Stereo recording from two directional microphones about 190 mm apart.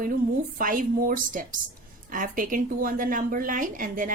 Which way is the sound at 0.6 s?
45° right (ahead or behind).